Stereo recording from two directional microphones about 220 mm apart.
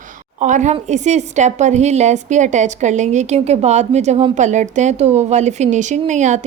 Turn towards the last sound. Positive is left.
turn(degrees=-35)  # may be behind; listen again after turning